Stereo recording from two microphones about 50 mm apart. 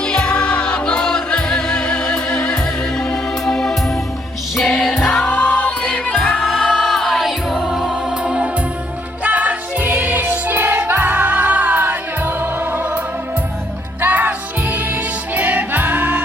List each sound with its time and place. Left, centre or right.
0.0 s music: left
4.9 s choir: centre
5.4 s music: left
6.3 s music: centre
8.2 s music: right
14.0 s music: right